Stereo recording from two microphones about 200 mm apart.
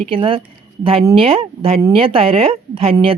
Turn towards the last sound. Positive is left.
turn(degrees=-30)  # may be behind; listen again after turning